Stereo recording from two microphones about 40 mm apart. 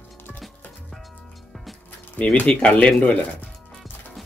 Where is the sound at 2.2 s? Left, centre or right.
Left.